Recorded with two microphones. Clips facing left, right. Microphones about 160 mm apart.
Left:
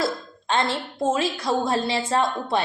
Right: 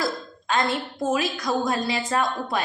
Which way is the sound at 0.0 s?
30° left (ahead or behind).